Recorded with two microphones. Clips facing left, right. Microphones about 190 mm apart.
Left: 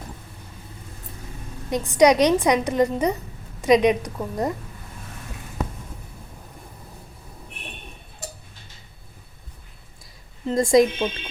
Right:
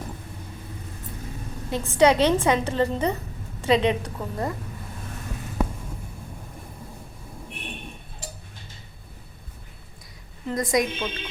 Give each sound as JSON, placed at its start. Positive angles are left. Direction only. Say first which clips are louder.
{"t": 1.7, "sound": "a woman's voice", "louder": "left 2 dB", "side_deg": 15}
{"t": 10.4, "sound": "a woman's voice", "louder": "left 7 dB", "side_deg": 25}